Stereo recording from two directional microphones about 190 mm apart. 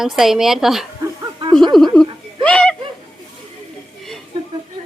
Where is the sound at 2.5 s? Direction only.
5° left (ahead or behind).